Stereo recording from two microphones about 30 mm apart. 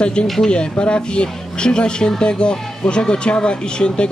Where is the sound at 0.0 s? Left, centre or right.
Left.